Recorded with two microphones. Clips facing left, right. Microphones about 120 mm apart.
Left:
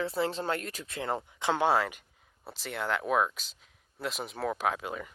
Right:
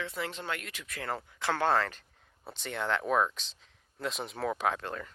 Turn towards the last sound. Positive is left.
turn(degrees=10)  # may be behind; listen again after turning